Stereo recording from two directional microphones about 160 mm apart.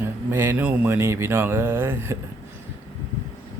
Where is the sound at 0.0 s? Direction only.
15° right (ahead or behind).